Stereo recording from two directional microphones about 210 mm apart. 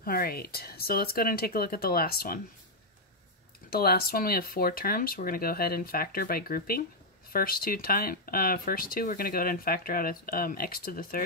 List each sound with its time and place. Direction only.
0.0 s speech: 45° left (ahead or behind)
3.7 s speech: 45° left (ahead or behind)